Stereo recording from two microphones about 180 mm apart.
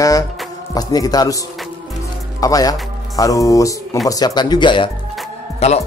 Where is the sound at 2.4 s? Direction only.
20° left (ahead or behind); by 5.8 s 35° left (ahead or behind).